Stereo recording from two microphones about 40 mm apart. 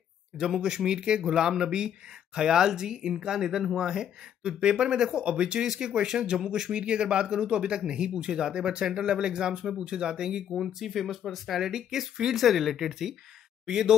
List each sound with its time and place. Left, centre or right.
0.6 s speech: centre
10.5 s speech: centre
11.6 s speech: centre
13.7 s speech: centre